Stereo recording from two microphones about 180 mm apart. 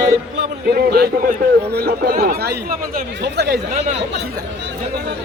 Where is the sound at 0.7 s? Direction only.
60° right (ahead or behind).